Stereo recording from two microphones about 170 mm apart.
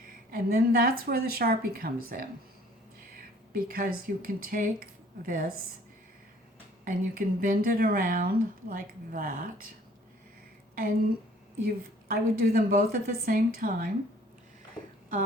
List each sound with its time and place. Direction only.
0.3 s speech: 60° right (ahead or behind)
3.5 s speech: 60° right (ahead or behind)
6.8 s speech: 60° right (ahead or behind)
11.6 s speech: 60° right (ahead or behind)